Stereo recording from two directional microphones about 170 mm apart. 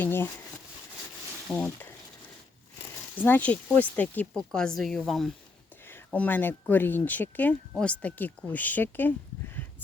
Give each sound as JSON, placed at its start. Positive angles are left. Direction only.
{"t": 0.0, "sound": "speech", "side_deg": 10}
{"t": 1.5, "sound": "speech", "side_deg": 10}
{"t": 3.2, "sound": "speech", "side_deg": 10}
{"t": 5.8, "sound": "a sound", "side_deg": 10}
{"t": 6.1, "sound": "speech", "side_deg": 10}